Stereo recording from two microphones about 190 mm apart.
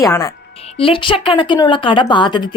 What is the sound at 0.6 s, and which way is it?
A woman's voice, 30° left (ahead or behind).